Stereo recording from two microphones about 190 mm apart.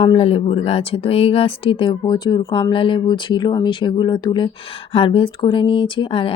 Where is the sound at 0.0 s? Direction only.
30° left (ahead or behind).